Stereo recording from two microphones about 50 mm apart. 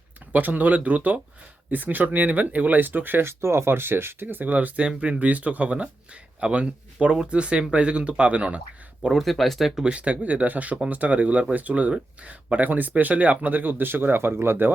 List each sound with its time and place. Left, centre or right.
0.3 s speech: right
4.9 s speech: right
9.1 s speech: centre
9.8 s speech: right